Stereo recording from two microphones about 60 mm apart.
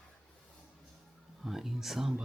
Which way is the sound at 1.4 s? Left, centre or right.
Centre.